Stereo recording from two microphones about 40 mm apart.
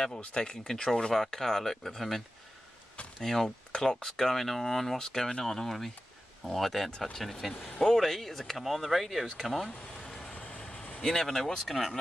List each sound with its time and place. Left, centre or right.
0.2 s speech: left; by 4.9 s centre
4.9 s speech: centre
9.7 s speech: left
10.3 s vehicle: left
11.0 s speech: centre